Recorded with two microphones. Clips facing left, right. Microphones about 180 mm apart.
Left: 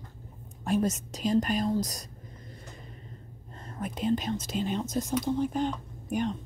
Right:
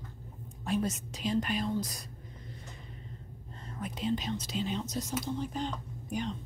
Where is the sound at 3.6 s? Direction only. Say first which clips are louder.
Left 4 dB; 50° left (ahead or behind).